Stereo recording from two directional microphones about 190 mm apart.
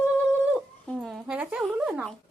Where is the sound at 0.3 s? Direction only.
5° left (ahead or behind).